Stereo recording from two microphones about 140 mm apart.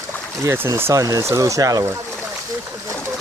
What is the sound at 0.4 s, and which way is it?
Speech, 20° right (ahead or behind).